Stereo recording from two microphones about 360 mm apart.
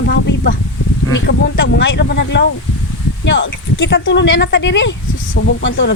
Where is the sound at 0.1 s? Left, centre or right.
Left.